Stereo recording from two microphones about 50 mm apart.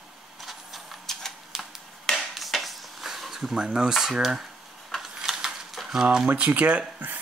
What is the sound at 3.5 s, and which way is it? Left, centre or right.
Speech, centre.